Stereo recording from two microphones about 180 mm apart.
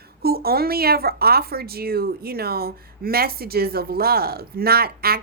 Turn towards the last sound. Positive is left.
turn(degrees=-60)  # may be behind; listen again after turning